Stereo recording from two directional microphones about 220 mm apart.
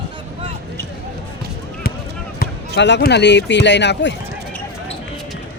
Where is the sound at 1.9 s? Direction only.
40° left (ahead or behind).